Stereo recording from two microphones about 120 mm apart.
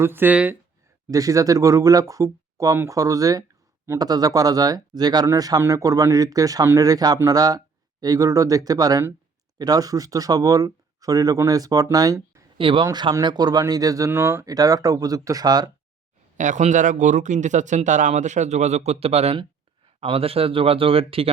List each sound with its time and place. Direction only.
0.0 s speech: 15° right (ahead or behind)
1.1 s speech: 30° right (ahead or behind)
12.5 s speech: 45° right (ahead or behind)
16.4 s speech: 90° right; by 21.2 s 50° right (ahead or behind)